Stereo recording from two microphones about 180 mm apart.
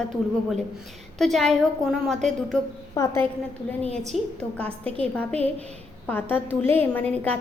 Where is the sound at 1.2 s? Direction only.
Centre (ahead or behind).